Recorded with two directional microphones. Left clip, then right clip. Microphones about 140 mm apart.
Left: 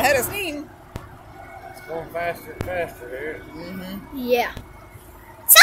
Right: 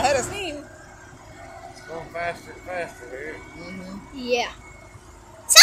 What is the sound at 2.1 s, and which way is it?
Speech, 20° left (ahead or behind).